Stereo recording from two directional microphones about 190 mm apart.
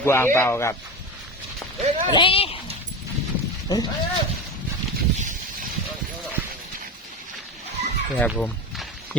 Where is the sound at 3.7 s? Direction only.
20° left (ahead or behind).